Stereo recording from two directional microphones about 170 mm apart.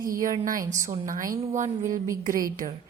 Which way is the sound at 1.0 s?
50° right (ahead or behind).